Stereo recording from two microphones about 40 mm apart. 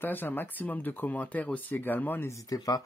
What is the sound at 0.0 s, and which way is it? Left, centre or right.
Speech, left.